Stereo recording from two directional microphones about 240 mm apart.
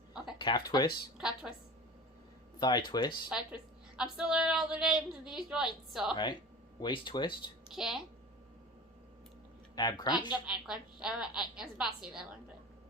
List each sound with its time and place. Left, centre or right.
0.3 s speech: left
1.2 s a woman's voice: centre
2.6 s speech: centre
3.9 s a woman's voice: centre
6.8 s speech: centre
7.7 s a woman's voice: centre
9.7 s speech: centre
10.4 s a woman's voice: centre